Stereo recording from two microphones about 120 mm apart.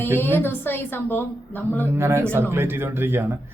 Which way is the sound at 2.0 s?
20° right (ahead or behind).